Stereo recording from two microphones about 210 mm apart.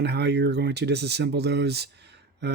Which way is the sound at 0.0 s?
55° right (ahead or behind).